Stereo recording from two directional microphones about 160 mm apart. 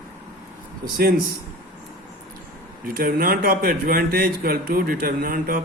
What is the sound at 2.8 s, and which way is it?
Speech, 65° right (ahead or behind).